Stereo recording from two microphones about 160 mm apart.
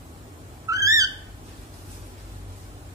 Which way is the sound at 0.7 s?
20° right (ahead or behind).